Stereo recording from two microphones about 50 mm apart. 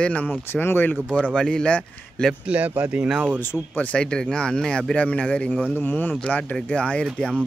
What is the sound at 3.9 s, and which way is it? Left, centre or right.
Speech, centre.